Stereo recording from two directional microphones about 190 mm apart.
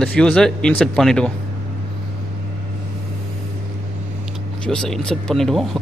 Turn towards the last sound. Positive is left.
turn(degrees=0)  # may be behind; listen again after turning